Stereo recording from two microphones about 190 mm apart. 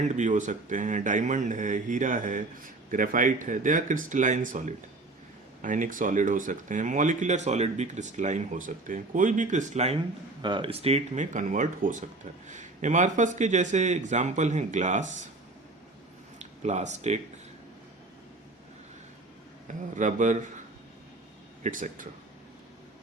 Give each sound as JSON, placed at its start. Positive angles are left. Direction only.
{"t": 0.0, "sound": "speech", "side_deg": -40}
{"t": 16.4, "sound": "speech", "side_deg": -40}
{"t": 19.6, "sound": "speech", "side_deg": -40}
{"t": 21.6, "sound": "speech", "side_deg": -45}